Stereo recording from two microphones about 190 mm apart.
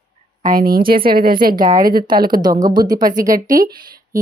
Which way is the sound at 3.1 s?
45° right (ahead or behind).